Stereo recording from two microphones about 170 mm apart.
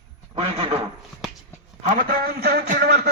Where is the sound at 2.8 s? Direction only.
70° right (ahead or behind).